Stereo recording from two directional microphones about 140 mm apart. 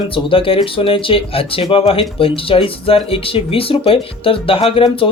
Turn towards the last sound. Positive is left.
turn(degrees=40)  # may be behind; listen again after turning